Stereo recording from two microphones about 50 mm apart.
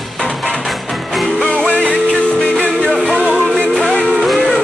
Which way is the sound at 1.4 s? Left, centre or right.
Left.